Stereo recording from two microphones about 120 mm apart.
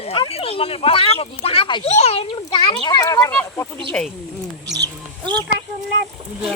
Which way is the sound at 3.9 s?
5° left (ahead or behind).